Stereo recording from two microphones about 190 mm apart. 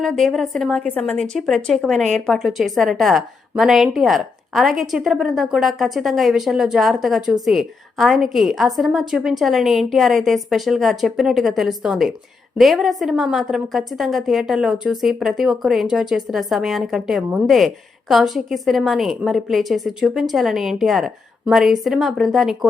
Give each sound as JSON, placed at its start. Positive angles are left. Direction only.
{"t": 0.0, "sound": "speech", "side_deg": 0}